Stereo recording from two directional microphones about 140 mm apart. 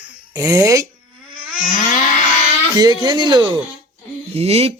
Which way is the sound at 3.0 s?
30° right (ahead or behind).